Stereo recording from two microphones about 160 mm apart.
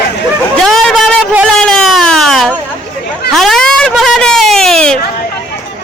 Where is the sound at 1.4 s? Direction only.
5° left (ahead or behind).